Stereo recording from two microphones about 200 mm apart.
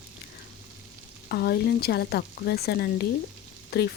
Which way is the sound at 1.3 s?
55° left (ahead or behind).